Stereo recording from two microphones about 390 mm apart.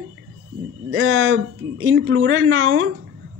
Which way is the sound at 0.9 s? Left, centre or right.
Right.